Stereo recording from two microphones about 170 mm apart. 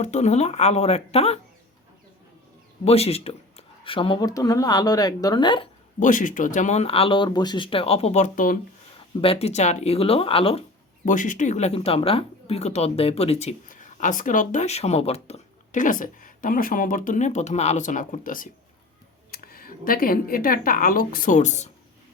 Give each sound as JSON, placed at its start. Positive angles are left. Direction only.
{"t": 0.0, "sound": "speech", "side_deg": 40}
{"t": 2.8, "sound": "speech", "side_deg": 35}
{"t": 6.0, "sound": "speech", "side_deg": 50}
{"t": 9.2, "sound": "speech", "side_deg": 35}
{"t": 11.0, "sound": "speech", "side_deg": 50}